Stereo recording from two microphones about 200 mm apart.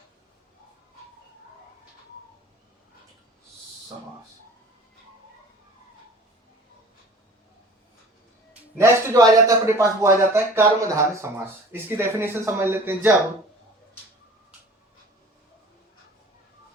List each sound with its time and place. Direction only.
8.8 s speech: 15° right (ahead or behind)